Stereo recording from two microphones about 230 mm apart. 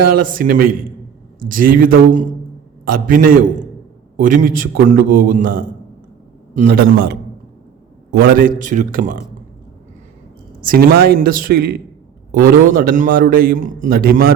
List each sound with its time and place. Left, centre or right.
0.0 s a man's voice: right
10.6 s a man's voice: right